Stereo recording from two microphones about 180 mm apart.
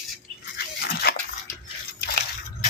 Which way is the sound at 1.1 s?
60° left (ahead or behind).